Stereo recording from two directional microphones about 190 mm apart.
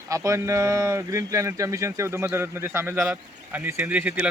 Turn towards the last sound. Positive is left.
turn(degrees=-10)  # may be behind; listen again after turning